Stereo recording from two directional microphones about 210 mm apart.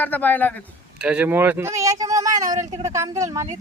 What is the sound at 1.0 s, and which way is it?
Speech, 5° right (ahead or behind).